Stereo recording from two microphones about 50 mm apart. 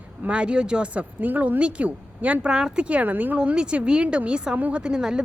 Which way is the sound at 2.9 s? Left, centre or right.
Right.